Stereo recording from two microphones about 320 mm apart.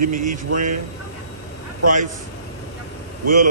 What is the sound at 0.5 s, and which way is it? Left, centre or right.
Speech, right.